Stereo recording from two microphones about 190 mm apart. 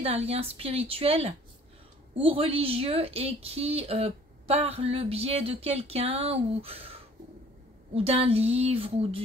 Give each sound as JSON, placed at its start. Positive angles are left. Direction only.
{"t": 0.0, "sound": "a woman's voice", "side_deg": -30}